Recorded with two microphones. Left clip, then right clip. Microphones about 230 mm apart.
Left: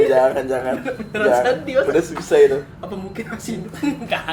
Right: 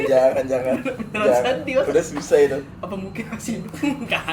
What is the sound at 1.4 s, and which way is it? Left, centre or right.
Speech, centre.